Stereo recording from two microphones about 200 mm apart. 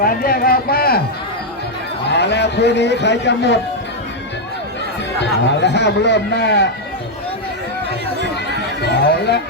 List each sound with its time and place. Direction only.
0.0 s a sound: 45° left (ahead or behind)
2.0 s a man's voice: 60° left (ahead or behind)
5.2 s a man's voice: 60° left (ahead or behind)
9.0 s a man's voice: 55° left (ahead or behind)